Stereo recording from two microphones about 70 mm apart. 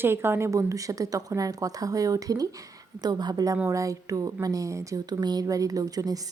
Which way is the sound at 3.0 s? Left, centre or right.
Right.